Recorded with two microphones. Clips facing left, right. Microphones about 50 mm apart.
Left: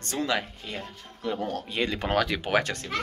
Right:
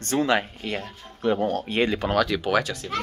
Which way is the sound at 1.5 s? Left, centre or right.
Right.